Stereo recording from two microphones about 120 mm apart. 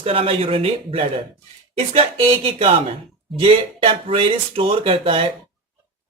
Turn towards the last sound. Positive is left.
turn(degrees=-50)  # may be behind; listen again after turning